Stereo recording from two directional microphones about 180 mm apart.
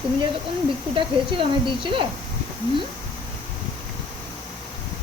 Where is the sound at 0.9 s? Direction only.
30° right (ahead or behind).